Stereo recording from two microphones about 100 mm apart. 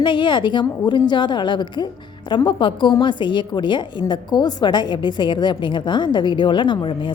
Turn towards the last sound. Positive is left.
turn(degrees=55)  # may be behind; listen again after turning